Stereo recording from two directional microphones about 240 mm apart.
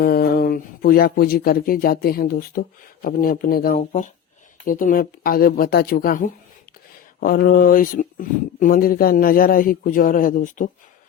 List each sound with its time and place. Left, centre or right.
0.0 s speech: left